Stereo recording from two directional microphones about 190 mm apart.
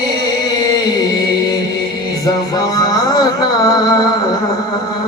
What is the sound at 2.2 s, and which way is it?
Music, 20° left (ahead or behind).